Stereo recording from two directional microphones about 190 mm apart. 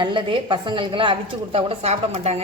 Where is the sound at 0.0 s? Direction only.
25° right (ahead or behind).